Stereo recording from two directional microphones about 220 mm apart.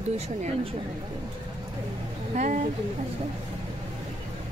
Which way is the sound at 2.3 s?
35° right (ahead or behind).